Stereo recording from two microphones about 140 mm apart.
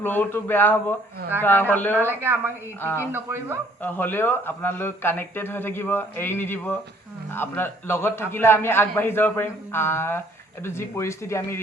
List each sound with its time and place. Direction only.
0.0 s speech: 15° left (ahead or behind)
2.0 s speech: 15° right (ahead or behind)
2.8 s speech: 20° left (ahead or behind)
3.1 s speech: 15° right (ahead or behind)
3.8 s speech: 15° left (ahead or behind)